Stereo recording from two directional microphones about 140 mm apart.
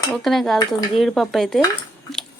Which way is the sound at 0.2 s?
Centre (ahead or behind).